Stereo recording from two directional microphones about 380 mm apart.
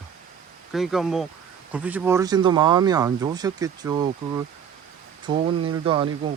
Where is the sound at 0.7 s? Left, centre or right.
Centre.